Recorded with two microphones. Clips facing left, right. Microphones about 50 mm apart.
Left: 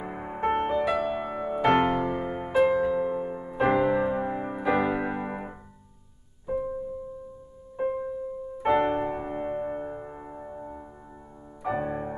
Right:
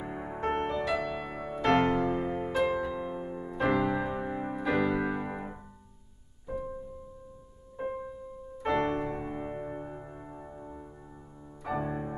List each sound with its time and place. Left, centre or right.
0.0 s music: left
2.0 s music: left
2.8 s music: centre
4.6 s keyboard: left
6.4 s music: centre
7.7 s music: centre
8.5 s music: left